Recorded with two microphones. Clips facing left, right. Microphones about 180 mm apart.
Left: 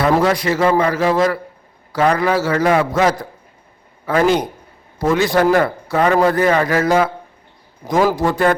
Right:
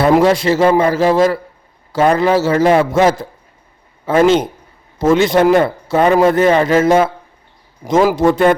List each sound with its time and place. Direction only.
0.2 s a man's voice: 25° right (ahead or behind)
8.1 s a man's voice: 20° right (ahead or behind)